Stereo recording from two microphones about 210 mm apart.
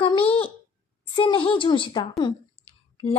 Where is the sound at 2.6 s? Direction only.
25° left (ahead or behind).